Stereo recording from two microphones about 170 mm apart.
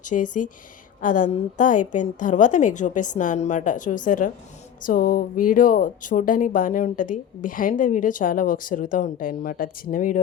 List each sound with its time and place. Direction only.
0.0 s speech: 50° left (ahead or behind)